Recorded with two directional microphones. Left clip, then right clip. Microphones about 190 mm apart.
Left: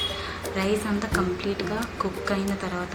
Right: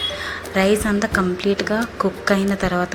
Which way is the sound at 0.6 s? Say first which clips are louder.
Right 9 dB; 35° right (ahead or behind).